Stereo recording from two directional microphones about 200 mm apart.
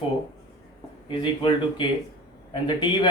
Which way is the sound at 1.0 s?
25° left (ahead or behind).